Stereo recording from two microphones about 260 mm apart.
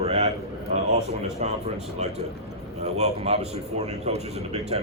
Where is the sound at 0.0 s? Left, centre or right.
Right.